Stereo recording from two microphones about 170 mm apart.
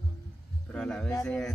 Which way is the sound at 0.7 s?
5° left (ahead or behind).